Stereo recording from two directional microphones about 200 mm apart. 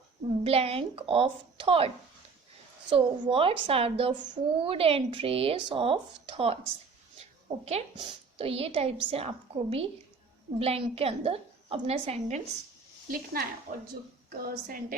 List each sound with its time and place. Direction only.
0.3 s speech: 30° right (ahead or behind)
2.9 s speech: 25° right (ahead or behind)
7.6 s speech: 30° right (ahead or behind)
13.1 s a woman's voice: 45° right (ahead or behind)